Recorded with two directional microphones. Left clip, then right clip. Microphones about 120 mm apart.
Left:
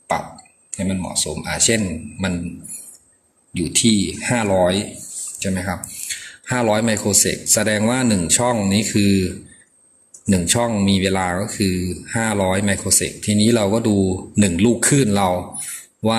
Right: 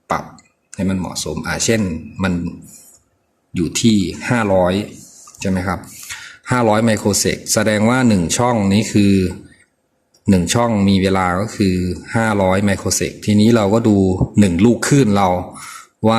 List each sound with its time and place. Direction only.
0.7 s speech: 60° right (ahead or behind)
3.5 s speech: 55° right (ahead or behind)